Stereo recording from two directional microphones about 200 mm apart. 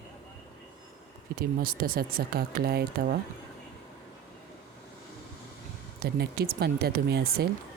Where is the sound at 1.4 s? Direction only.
45° right (ahead or behind).